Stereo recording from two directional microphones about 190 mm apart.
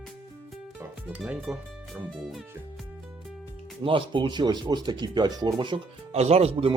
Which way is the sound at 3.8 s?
25° right (ahead or behind).